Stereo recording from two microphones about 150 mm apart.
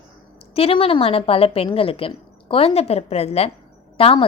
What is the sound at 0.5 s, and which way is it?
A woman's voice, 40° left (ahead or behind).